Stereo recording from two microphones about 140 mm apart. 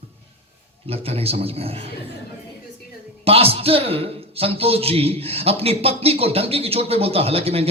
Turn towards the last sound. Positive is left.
turn(degrees=-45)  # may be behind; listen again after turning